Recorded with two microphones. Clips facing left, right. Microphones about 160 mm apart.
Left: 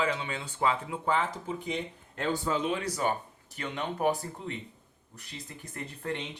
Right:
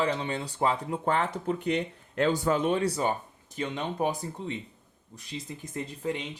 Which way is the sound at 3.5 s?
25° right (ahead or behind).